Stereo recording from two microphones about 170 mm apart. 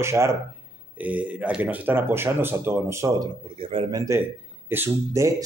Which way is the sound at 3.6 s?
30° right (ahead or behind).